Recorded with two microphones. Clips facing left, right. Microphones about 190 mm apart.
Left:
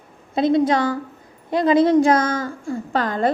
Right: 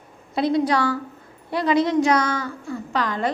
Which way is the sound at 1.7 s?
50° left (ahead or behind).